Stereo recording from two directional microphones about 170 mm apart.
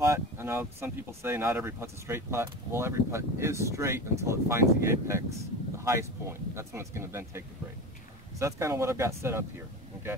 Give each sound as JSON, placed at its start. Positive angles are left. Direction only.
{"t": 0.0, "sound": "speech", "side_deg": -15}